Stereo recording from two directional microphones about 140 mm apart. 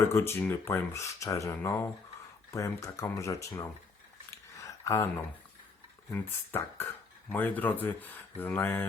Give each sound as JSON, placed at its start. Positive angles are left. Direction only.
{"t": 0.1, "sound": "speech", "side_deg": 15}
{"t": 4.3, "sound": "a sound", "side_deg": 20}
{"t": 6.1, "sound": "speech", "side_deg": 15}